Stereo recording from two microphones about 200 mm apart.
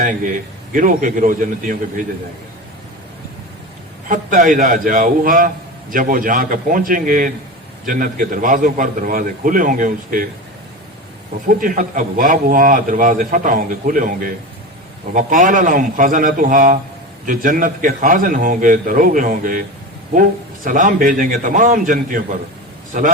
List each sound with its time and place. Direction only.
0.7 s a man's voice: 40° right (ahead or behind)
4.1 s a man's voice: 40° right (ahead or behind)
11.4 s a man's voice: 40° right (ahead or behind)
20.7 s a man's voice: 40° right (ahead or behind)